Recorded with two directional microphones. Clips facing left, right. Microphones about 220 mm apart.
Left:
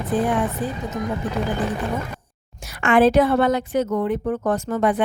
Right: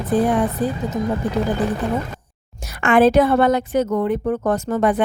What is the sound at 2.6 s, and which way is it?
A woman's voice, 45° right (ahead or behind).